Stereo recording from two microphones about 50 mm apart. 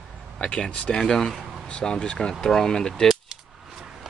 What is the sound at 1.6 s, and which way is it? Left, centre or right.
Speech, centre.